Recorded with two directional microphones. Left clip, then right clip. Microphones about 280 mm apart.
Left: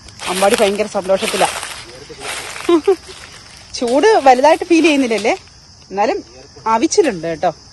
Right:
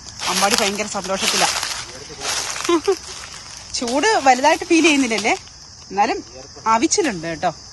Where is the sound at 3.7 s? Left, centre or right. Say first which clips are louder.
Left 6 dB; centre.